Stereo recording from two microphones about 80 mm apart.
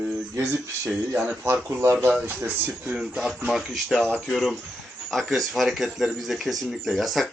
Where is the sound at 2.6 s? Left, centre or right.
Centre.